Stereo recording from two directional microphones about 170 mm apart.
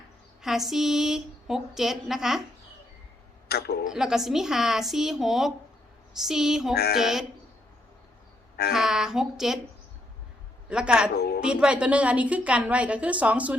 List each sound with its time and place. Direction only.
0.4 s speech: centre (ahead or behind)
3.5 s speech: 65° left (ahead or behind)
3.8 s speech: 5° right (ahead or behind)
8.7 s speech: centre (ahead or behind)
10.7 s speech: 5° right (ahead or behind)
11.1 s a woman's voice: 65° left (ahead or behind)
11.4 s a woman's voice: 5° right (ahead or behind)